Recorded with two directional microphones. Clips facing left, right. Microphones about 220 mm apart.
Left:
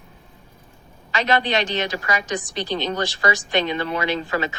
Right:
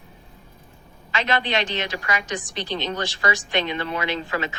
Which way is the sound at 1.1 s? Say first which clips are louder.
Left 3 dB; 40° left (ahead or behind).